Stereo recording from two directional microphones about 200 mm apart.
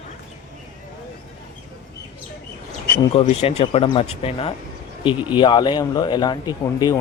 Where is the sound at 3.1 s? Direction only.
35° left (ahead or behind).